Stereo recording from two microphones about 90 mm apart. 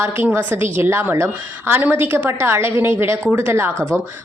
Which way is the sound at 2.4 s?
30° right (ahead or behind).